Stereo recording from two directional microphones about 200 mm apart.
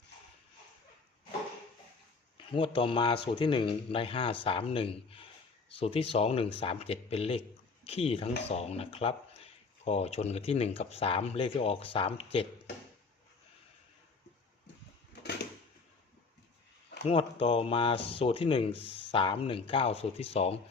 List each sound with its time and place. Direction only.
2.5 s speech: 25° left (ahead or behind)
15.1 s a sound: 55° left (ahead or behind)
17.0 s speech: 30° left (ahead or behind)